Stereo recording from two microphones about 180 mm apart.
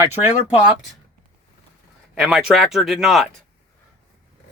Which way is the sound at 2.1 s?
Centre (ahead or behind).